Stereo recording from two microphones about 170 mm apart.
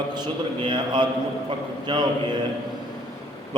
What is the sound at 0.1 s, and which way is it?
A man's voice, 25° right (ahead or behind).